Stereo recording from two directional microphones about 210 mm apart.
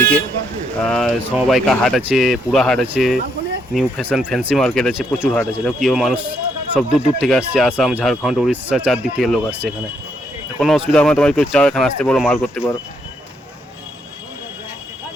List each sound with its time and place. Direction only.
0.8 s speech: 5° left (ahead or behind)
5.4 s speech: 10° left (ahead or behind)
5.8 s speech: centre (ahead or behind)
12.4 s speech: 10° left (ahead or behind)